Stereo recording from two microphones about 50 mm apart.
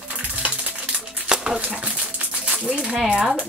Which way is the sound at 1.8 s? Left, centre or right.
Right.